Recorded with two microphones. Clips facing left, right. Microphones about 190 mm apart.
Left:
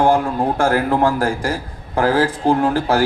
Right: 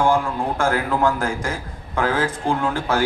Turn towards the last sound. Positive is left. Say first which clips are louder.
# left 5 dB
turn(degrees=35)  # may be behind; listen again after turning